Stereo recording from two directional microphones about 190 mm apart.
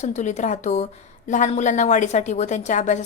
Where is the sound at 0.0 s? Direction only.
40° left (ahead or behind).